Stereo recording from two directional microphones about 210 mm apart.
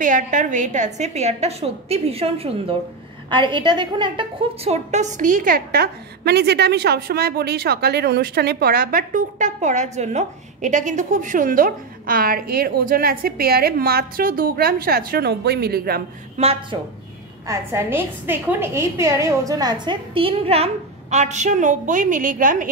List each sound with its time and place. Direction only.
0.0 s a woman's voice: 40° right (ahead or behind)
16.7 s a woman's voice: 25° right (ahead or behind)
17.5 s a woman's voice: 10° right (ahead or behind); by 22.7 s 40° right (ahead or behind)